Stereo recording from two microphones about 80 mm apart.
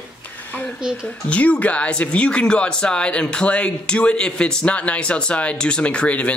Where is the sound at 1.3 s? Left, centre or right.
Centre.